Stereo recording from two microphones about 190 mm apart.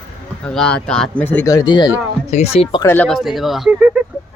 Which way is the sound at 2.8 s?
10° left (ahead or behind).